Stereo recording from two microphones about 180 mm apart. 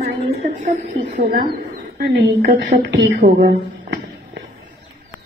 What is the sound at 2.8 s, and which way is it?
Speech, 75° right (ahead or behind).